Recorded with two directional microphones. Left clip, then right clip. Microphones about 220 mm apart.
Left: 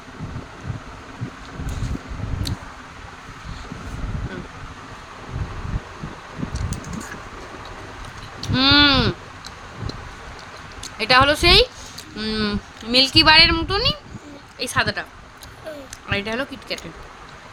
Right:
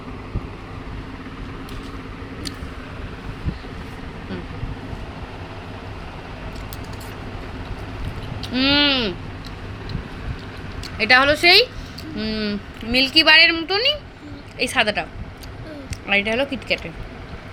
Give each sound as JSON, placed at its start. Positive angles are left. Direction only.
{"t": 8.4, "sound": "a sound", "side_deg": 20}
{"t": 10.9, "sound": "speech", "side_deg": 5}
{"t": 12.1, "sound": "speech", "side_deg": 20}
{"t": 13.7, "sound": "speech", "side_deg": 0}
{"t": 16.0, "sound": "speech", "side_deg": 0}